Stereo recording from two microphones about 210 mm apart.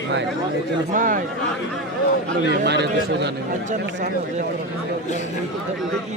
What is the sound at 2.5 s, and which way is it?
Speech, 55° right (ahead or behind).